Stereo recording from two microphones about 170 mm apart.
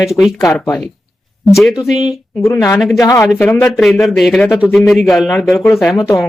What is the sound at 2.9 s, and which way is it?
Speech, 20° left (ahead or behind).